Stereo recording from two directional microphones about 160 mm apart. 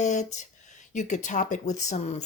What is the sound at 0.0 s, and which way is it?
A woman's voice, 45° left (ahead or behind).